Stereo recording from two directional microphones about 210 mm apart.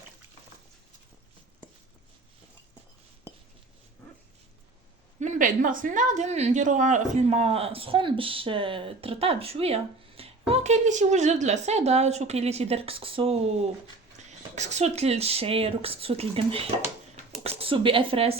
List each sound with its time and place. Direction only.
5.2 s a woman's voice: 35° right (ahead or behind)